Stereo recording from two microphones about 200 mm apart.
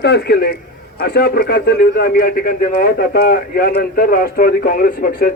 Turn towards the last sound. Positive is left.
turn(degrees=45)  # may be behind; listen again after turning